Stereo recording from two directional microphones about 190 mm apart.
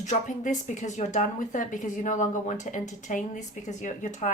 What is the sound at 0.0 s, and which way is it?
A woman's voice, 40° left (ahead or behind).